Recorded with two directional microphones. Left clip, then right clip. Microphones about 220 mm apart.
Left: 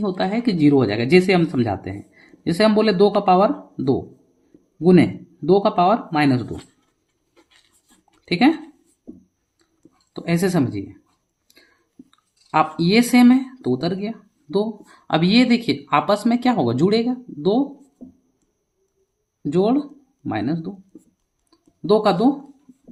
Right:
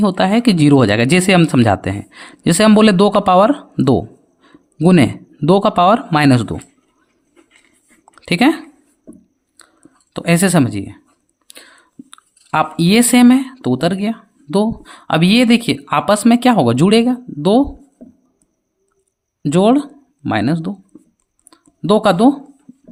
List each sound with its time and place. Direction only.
0.0 s speech: 45° right (ahead or behind)
8.2 s speech: 45° right (ahead or behind)
10.1 s speech: 45° right (ahead or behind)
19.5 s speech: 45° right (ahead or behind)
21.5 s a sound: 45° right (ahead or behind)